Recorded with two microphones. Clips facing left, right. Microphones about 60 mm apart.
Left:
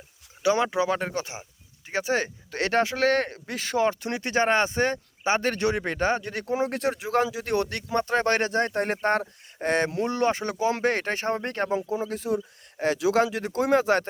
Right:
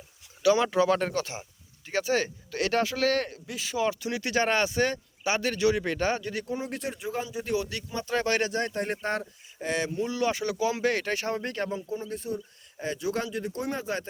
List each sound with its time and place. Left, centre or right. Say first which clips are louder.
0.4 s speech: right 1 dB; left
6.5 s speech: left 12 dB; left
8.1 s speech: left 2 dB; left
11.7 s speech: left 6 dB; left